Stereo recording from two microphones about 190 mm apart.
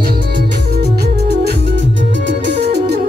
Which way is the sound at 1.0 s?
60° right (ahead or behind).